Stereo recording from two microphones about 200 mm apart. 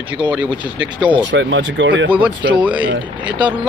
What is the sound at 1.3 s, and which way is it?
Speech, 70° right (ahead or behind).